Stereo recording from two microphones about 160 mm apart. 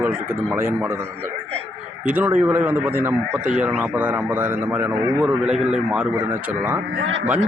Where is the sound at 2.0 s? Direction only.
10° right (ahead or behind).